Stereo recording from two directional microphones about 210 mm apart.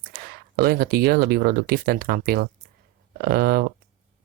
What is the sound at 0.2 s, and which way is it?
Speech, 45° right (ahead or behind).